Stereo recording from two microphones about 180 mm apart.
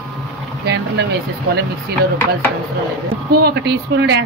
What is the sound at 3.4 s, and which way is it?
Speech, 70° right (ahead or behind).